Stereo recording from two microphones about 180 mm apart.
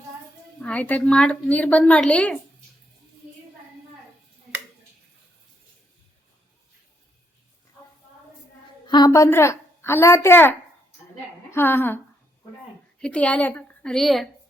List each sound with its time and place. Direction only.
0.6 s a woman's voice: 5° left (ahead or behind)
8.9 s a woman's voice: 20° left (ahead or behind)
13.0 s a woman's voice: 5° left (ahead or behind)